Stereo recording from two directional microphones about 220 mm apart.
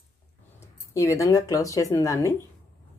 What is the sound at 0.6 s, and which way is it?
Speech, 15° left (ahead or behind).